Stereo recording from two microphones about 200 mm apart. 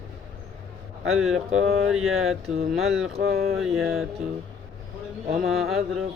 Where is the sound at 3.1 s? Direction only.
50° right (ahead or behind).